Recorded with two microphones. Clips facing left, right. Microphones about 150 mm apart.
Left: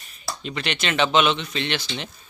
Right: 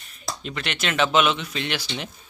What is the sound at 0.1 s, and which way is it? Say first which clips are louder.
A man's voice: left 1 dB; centre (ahead or behind).